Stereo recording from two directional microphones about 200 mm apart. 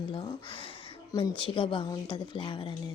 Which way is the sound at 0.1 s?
25° left (ahead or behind).